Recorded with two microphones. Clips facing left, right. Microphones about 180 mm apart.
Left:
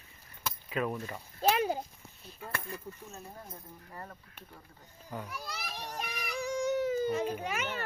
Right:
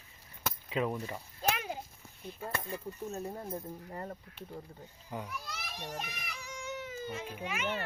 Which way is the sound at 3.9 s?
30° right (ahead or behind).